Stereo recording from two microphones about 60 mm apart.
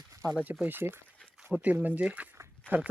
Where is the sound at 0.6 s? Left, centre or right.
Right.